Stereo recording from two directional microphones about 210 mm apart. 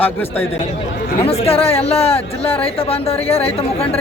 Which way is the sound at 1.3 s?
30° left (ahead or behind).